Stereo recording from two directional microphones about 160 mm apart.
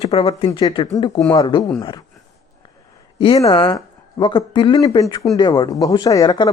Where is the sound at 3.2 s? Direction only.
30° left (ahead or behind).